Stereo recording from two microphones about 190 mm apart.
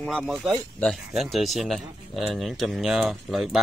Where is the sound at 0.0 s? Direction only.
5° left (ahead or behind).